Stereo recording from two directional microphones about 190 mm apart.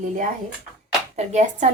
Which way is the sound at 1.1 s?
35° right (ahead or behind).